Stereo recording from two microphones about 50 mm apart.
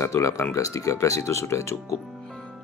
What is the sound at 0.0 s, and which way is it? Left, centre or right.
Speech, left.